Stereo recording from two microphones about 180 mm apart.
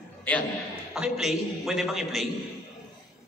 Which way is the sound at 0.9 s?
5° right (ahead or behind).